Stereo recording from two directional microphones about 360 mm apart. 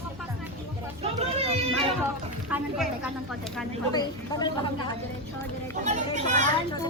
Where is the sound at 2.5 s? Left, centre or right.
Centre.